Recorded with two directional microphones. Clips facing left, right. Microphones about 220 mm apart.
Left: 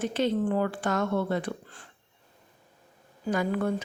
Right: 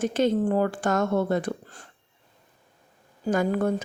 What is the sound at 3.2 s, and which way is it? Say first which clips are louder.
Speech: right 4 dB; 45° right (ahead or behind).